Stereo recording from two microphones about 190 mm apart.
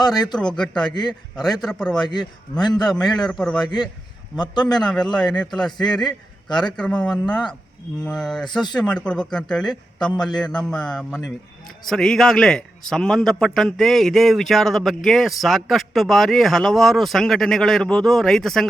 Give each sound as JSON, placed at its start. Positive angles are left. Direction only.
{"t": 0.3, "sound": "a man's voice", "side_deg": 5}
{"t": 2.0, "sound": "speech", "side_deg": 20}
{"t": 2.7, "sound": "a man's voice", "side_deg": 5}
{"t": 3.6, "sound": "speech", "side_deg": 20}
{"t": 4.9, "sound": "a man's voice", "side_deg": 5}